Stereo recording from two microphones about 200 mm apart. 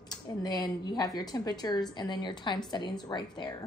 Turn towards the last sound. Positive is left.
turn(degrees=20)  # may be behind; listen again after turning